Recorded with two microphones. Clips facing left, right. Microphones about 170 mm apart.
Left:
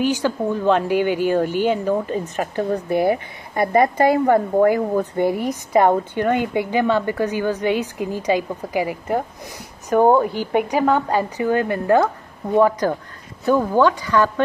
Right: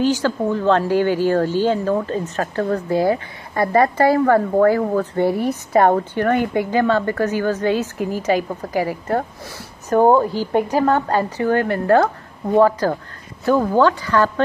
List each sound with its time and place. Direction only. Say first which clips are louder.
0.0 s speech: right 2 dB; 15° left (ahead or behind)
10.4 s speech: right 1 dB; 15° left (ahead or behind)